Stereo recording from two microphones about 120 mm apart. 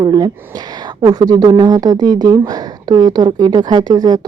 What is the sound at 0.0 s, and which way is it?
A woman's voice, 35° right (ahead or behind).